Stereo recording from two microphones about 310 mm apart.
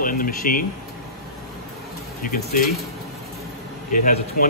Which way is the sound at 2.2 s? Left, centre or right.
Left.